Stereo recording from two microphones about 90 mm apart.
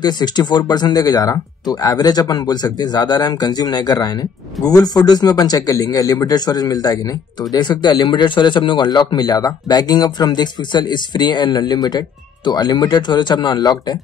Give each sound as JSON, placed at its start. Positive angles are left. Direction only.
{"t": 0.0, "sound": "speech", "side_deg": 50}